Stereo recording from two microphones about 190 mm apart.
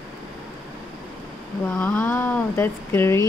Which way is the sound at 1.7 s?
10° left (ahead or behind).